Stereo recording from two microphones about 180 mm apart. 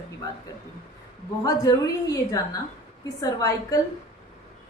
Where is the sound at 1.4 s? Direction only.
20° left (ahead or behind).